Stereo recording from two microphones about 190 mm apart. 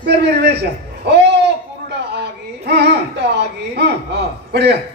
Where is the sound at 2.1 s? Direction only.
60° right (ahead or behind).